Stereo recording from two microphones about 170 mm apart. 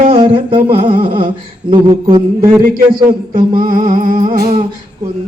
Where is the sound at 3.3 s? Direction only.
50° right (ahead or behind).